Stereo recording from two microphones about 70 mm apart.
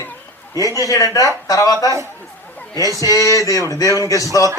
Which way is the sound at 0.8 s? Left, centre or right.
Left.